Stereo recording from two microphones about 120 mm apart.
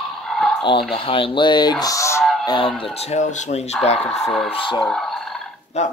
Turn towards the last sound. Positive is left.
turn(degrees=70)  # may be behind; listen again after turning